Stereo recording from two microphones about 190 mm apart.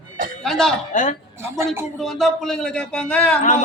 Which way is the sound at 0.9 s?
40° left (ahead or behind).